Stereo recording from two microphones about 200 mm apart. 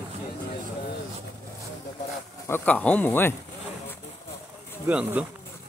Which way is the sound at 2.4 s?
10° left (ahead or behind).